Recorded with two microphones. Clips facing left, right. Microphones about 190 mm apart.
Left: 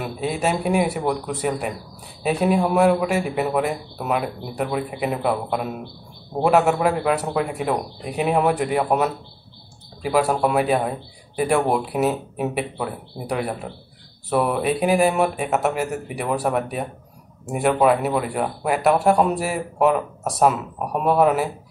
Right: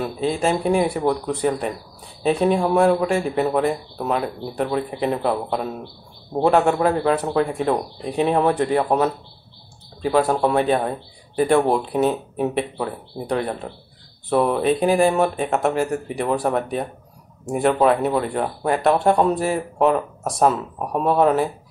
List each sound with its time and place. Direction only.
0.0 s a man's voice: 5° left (ahead or behind)
10.0 s speech: 10° left (ahead or behind)